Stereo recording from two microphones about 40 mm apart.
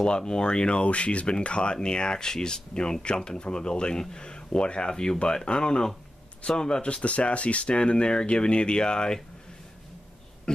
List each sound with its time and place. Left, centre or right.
0.0 s speech: left